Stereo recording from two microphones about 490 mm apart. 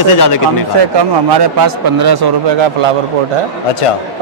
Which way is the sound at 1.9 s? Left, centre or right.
Right.